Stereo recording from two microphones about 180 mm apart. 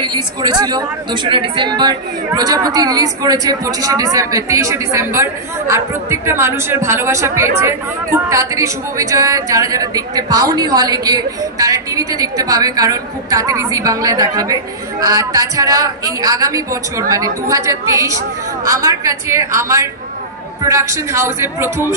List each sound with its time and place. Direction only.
0.0 s a woman's voice: 25° right (ahead or behind)